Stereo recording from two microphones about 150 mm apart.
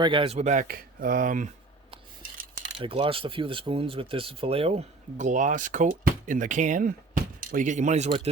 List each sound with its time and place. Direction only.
0.0 s speech: 35° right (ahead or behind)
0.3 s speech: 55° right (ahead or behind)
2.7 s speech: 35° right (ahead or behind); by 8.1 s 50° right (ahead or behind)